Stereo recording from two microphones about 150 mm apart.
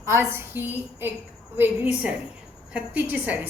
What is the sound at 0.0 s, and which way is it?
A woman's voice, 15° right (ahead or behind).